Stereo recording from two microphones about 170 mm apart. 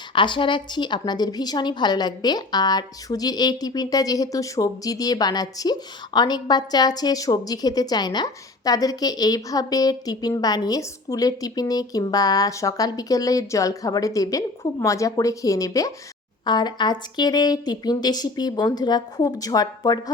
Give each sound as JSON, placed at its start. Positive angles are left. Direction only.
{"t": 0.1, "sound": "a woman's voice", "side_deg": 30}